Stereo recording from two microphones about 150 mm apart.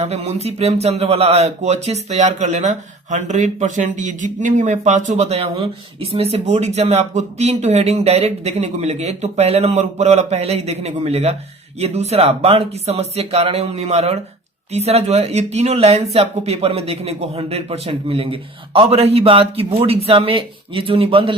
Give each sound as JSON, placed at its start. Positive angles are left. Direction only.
{"t": 0.0, "sound": "a man's voice", "side_deg": -45}